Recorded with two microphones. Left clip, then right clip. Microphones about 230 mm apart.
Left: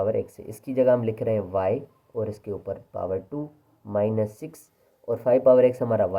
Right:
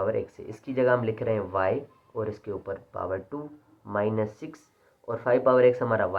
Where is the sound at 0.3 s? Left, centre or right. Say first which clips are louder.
Left 1 dB; left.